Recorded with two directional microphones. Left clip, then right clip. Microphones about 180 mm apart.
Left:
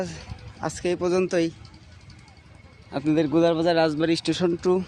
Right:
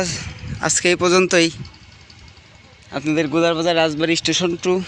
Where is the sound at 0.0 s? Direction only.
10° right (ahead or behind).